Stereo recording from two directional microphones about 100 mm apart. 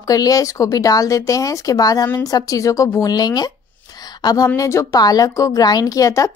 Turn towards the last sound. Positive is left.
turn(degrees=35)  # may be behind; listen again after turning